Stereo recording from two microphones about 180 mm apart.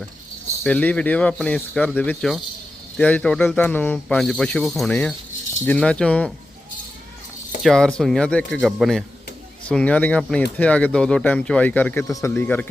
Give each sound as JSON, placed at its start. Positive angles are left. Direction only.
{"t": 0.6, "sound": "speech", "side_deg": 10}
{"t": 7.6, "sound": "speech", "side_deg": 5}